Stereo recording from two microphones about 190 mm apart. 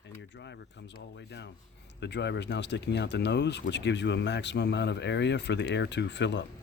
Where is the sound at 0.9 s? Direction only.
65° left (ahead or behind).